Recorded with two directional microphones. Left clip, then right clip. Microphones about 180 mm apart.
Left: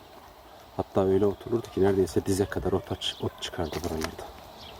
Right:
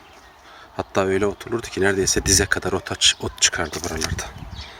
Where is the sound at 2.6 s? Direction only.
30° right (ahead or behind).